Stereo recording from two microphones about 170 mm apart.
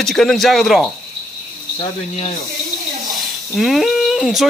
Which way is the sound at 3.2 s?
Centre (ahead or behind).